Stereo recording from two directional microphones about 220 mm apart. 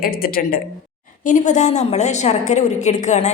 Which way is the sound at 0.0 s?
40° left (ahead or behind).